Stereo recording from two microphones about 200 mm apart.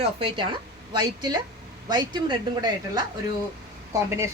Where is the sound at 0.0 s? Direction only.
25° right (ahead or behind).